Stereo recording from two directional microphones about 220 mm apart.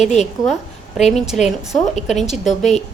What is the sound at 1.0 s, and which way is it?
A woman's voice, centre (ahead or behind).